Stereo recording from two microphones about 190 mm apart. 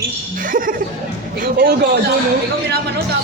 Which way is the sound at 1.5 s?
55° right (ahead or behind).